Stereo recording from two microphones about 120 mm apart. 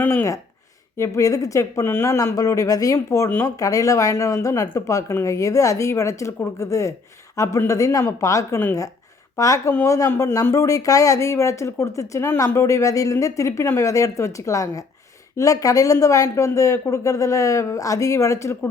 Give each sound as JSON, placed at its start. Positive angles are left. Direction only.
{"t": 0.0, "sound": "speech", "side_deg": 20}